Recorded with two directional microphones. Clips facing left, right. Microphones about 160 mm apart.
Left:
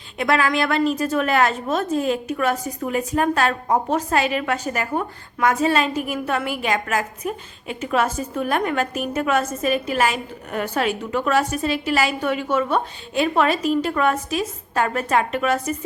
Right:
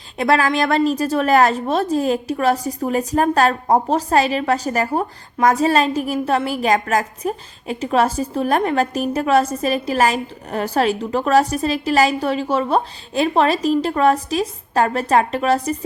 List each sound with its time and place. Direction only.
0.2 s a woman's voice: 35° right (ahead or behind)